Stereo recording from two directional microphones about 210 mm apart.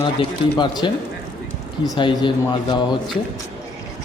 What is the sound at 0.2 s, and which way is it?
A man's voice, 20° left (ahead or behind).